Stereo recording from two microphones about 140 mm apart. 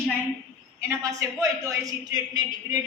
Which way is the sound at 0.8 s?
20° right (ahead or behind).